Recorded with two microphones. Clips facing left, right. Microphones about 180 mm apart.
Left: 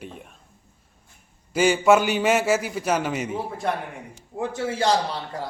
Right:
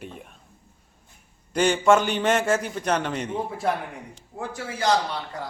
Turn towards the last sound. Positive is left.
turn(degrees=30)  # may be behind; listen again after turning